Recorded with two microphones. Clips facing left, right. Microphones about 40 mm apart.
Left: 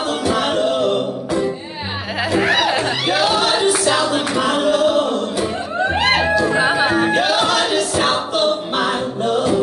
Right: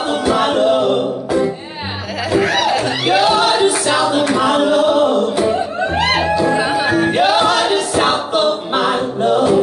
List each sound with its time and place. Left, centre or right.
0.1 s music: centre
2.4 s chatter: centre
3.1 s choir: centre
4.3 s a sound: centre
6.6 s music: left
7.1 s music: centre